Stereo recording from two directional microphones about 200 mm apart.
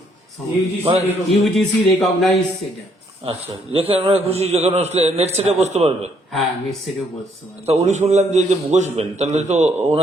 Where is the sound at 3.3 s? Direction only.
30° right (ahead or behind).